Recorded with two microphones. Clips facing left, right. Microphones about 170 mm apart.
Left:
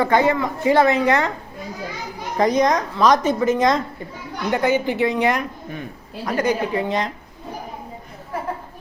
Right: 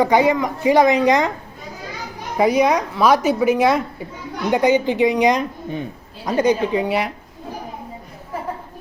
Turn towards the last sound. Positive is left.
turn(degrees=-10)  # may be behind; listen again after turning